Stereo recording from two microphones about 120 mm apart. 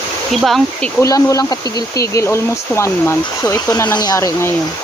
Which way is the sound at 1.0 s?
30° left (ahead or behind).